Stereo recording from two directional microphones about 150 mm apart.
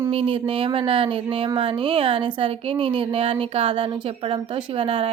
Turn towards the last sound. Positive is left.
turn(degrees=-40)  # may be behind; listen again after turning